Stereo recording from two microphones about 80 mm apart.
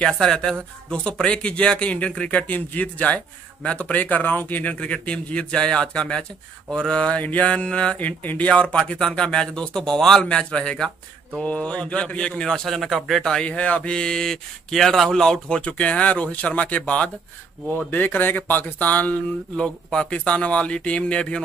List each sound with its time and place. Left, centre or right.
0.0 s a man's voice: centre
19.5 s a man's voice: centre